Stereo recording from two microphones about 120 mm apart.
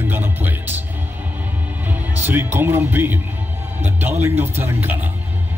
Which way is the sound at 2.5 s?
20° right (ahead or behind).